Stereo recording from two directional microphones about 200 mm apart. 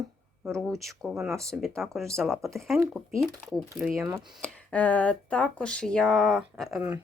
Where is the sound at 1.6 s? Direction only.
Centre (ahead or behind).